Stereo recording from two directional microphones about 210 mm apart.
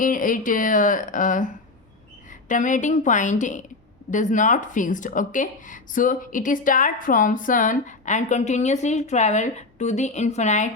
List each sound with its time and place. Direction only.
0.0 s speech: 40° left (ahead or behind)